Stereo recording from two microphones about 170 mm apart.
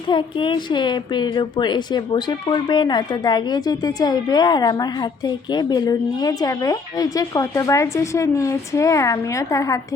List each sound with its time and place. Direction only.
0.1 s a woman's voice: 30° left (ahead or behind)